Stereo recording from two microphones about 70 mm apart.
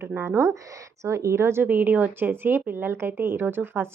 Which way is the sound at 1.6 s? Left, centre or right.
Right.